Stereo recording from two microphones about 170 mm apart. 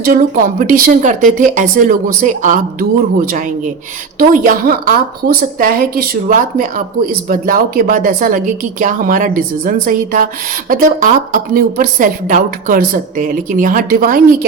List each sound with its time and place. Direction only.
0.0 s a woman's voice: 55° right (ahead or behind)